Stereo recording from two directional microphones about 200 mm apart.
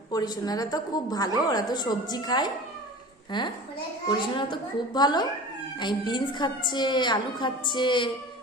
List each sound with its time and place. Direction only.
0.1 s a woman's voice: 20° left (ahead or behind)